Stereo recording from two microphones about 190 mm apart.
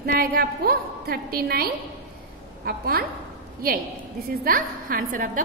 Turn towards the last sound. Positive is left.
turn(degrees=-50)  # may be behind; listen again after turning